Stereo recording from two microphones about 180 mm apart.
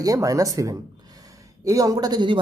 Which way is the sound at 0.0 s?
20° right (ahead or behind).